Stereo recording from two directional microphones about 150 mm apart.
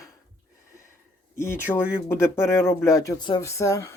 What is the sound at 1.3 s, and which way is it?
Speech, 15° left (ahead or behind).